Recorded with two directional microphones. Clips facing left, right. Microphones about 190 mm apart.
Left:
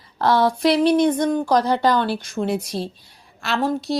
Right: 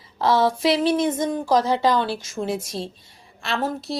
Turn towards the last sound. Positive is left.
turn(degrees=0)  # may be behind; listen again after turning